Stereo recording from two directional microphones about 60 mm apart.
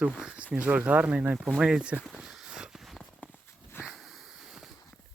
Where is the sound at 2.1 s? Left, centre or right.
Centre.